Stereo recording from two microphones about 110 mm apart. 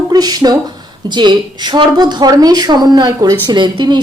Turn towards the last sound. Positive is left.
turn(degrees=-45)  # may be behind; listen again after turning